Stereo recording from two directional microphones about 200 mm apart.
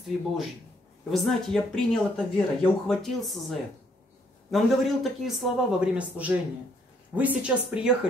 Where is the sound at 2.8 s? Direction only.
Centre (ahead or behind).